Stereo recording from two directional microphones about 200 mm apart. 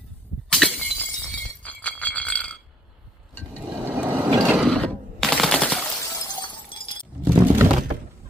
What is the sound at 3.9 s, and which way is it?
Vehicle, 5° right (ahead or behind).